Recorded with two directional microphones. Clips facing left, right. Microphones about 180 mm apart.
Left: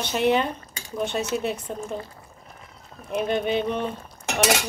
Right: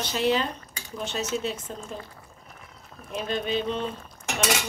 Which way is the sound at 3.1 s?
60° left (ahead or behind).